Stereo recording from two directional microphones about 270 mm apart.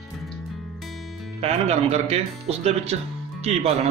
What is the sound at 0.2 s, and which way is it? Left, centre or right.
Music, centre.